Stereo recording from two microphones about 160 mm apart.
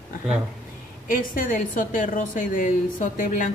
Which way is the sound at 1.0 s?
60° left (ahead or behind).